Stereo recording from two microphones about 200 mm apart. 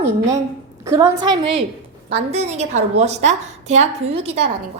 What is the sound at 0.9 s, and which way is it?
A woman's voice, 15° right (ahead or behind).